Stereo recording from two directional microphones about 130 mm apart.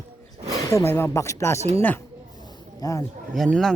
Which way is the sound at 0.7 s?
20° left (ahead or behind).